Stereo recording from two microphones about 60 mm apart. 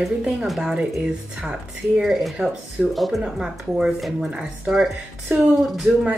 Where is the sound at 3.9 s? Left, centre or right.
Centre.